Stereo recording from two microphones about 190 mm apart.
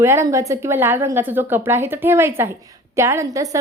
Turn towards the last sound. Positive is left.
turn(degrees=-15)  # may be behind; listen again after turning